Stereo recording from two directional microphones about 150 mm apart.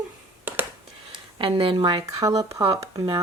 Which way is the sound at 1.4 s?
35° right (ahead or behind).